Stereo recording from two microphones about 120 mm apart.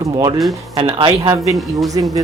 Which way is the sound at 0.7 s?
50° right (ahead or behind).